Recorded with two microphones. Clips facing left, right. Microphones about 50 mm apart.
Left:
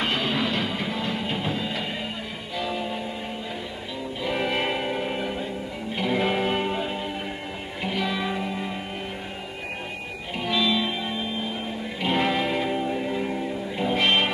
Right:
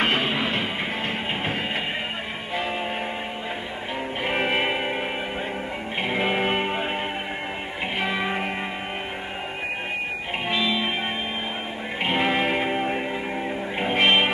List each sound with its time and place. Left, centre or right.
0.0 s music: right
4.2 s music: right
10.5 s music: right
12.0 s music: right
13.1 s music: right